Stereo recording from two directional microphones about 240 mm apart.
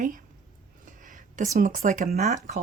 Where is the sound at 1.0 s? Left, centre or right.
Right.